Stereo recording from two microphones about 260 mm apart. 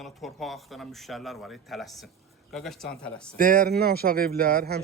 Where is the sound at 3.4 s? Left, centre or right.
Right.